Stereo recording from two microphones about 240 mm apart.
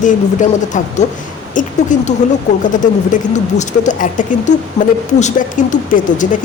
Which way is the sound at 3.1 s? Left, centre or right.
Left.